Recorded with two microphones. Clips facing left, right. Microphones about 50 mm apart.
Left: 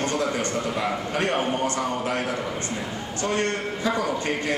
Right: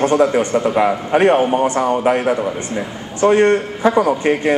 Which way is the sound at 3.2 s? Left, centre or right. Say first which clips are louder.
Right 13 dB; right.